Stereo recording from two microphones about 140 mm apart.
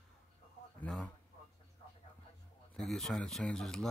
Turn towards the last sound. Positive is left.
turn(degrees=5)  # may be behind; listen again after turning